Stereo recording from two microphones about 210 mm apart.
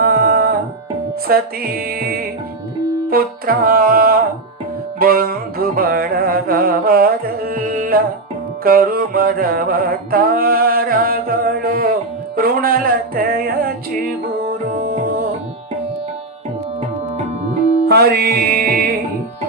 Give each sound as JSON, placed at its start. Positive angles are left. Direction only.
{"t": 0.0, "sound": "music", "side_deg": -45}
{"t": 14.7, "sound": "tabla", "side_deg": -40}
{"t": 17.8, "sound": "music", "side_deg": -50}